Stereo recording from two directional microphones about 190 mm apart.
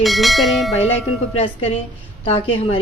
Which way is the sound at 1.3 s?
30° left (ahead or behind).